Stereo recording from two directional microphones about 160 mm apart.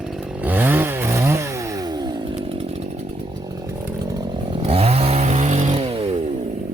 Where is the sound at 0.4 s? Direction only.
10° right (ahead or behind).